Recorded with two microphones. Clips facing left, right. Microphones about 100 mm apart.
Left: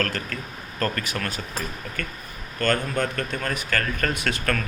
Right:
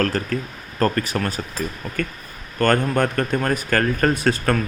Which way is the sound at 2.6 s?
50° right (ahead or behind).